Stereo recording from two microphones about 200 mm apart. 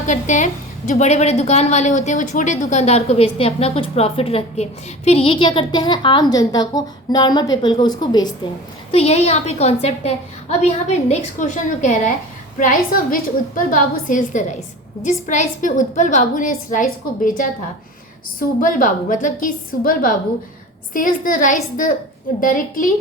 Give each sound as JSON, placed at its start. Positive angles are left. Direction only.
{"t": 0.0, "sound": "a woman's voice", "side_deg": 35}
{"t": 8.9, "sound": "a woman's voice", "side_deg": 30}